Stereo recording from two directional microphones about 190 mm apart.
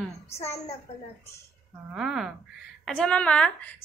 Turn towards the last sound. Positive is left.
turn(degrees=5)  # may be behind; listen again after turning